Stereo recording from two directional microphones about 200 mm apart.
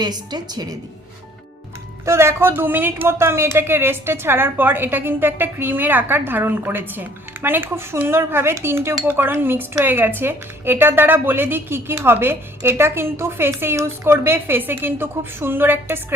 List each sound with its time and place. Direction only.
0.0 s a woman's voice: 20° right (ahead or behind)
2.0 s speech: 15° right (ahead or behind)